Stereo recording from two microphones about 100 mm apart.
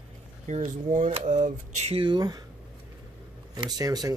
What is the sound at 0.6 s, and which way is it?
Speech, 85° right.